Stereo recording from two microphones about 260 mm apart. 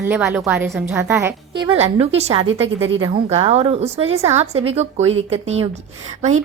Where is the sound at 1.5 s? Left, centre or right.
Centre.